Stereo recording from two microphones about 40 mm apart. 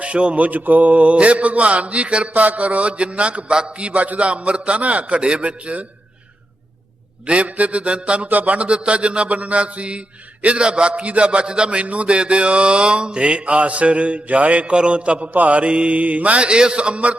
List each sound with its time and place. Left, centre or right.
0.0 s mantra: right
7.3 s mantra: right
8.3 s mantra: right
10.4 s a man's voice: right
15.3 s mantra: right